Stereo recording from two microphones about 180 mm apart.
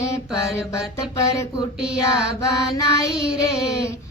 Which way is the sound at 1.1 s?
20° left (ahead or behind).